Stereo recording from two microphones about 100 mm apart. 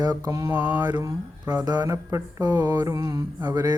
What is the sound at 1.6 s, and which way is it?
Speech, 40° right (ahead or behind).